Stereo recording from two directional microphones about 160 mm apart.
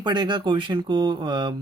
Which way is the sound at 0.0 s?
30° right (ahead or behind).